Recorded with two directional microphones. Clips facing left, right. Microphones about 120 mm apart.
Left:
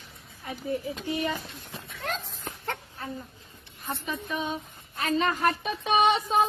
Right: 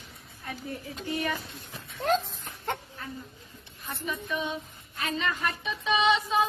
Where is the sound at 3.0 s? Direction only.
30° left (ahead or behind).